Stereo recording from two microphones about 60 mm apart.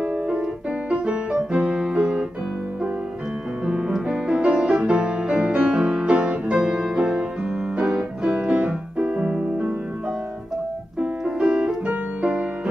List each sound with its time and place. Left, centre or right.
0.1 s keyboard: centre
3.6 s music: centre
7.8 s keyboard: centre
11.0 s piano: centre
11.8 s piano: right